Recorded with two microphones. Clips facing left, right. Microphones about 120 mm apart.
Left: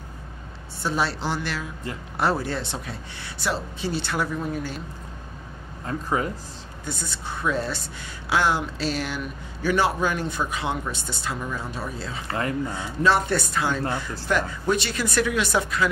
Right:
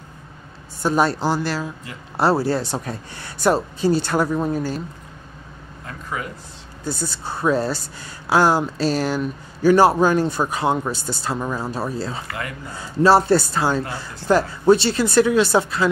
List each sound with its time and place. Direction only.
0.8 s a woman's voice: 45° right (ahead or behind)
5.9 s speech: 30° left (ahead or behind)
6.8 s a woman's voice: 35° right (ahead or behind)
12.3 s speech: 30° left (ahead or behind)
12.7 s a woman's voice: 35° right (ahead or behind)